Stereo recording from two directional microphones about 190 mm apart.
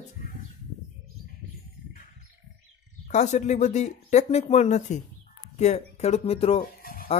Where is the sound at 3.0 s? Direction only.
40° left (ahead or behind).